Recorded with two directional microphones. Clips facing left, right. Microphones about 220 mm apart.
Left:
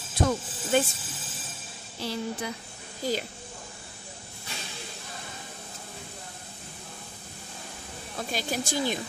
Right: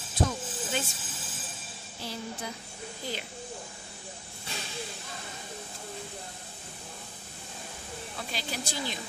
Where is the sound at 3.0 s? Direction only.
40° left (ahead or behind).